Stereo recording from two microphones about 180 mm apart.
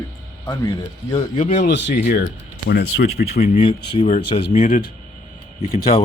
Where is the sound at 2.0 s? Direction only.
60° left (ahead or behind).